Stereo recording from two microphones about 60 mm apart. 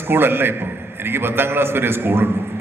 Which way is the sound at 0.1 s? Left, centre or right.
Right.